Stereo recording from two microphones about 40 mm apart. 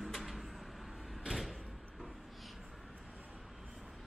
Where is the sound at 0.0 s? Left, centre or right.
Centre.